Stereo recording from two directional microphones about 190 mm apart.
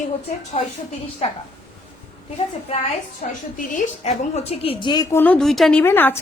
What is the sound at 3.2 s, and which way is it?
A woman's voice, 45° left (ahead or behind).